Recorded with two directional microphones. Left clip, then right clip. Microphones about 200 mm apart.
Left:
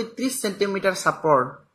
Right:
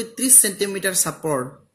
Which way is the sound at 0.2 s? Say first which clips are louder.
Right 4 dB; 25° right (ahead or behind).